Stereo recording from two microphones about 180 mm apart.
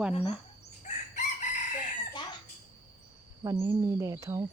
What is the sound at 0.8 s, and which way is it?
Chicken, 40° left (ahead or behind).